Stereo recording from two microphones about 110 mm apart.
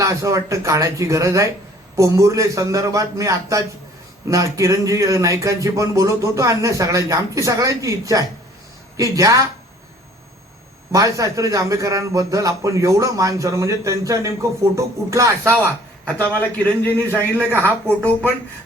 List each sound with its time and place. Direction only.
0.0 s a man's voice: 30° right (ahead or behind)
10.9 s a man's voice: 30° right (ahead or behind)
16.0 s a man's voice: 15° left (ahead or behind)